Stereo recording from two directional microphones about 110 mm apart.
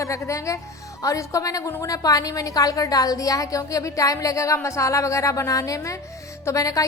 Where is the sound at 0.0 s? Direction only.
30° left (ahead or behind).